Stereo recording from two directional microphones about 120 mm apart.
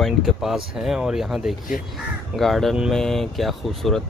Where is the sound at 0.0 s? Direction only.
Centre (ahead or behind).